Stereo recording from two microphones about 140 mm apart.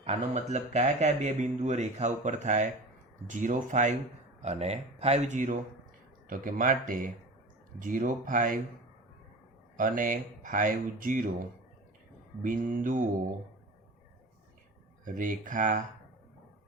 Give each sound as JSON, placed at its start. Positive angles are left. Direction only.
{"t": 0.0, "sound": "speech", "side_deg": -50}
{"t": 4.4, "sound": "speech", "side_deg": -50}
{"t": 6.2, "sound": "speech", "side_deg": -75}
{"t": 9.7, "sound": "speech", "side_deg": -75}
{"t": 12.4, "sound": "speech", "side_deg": -75}
{"t": 15.0, "sound": "speech", "side_deg": -70}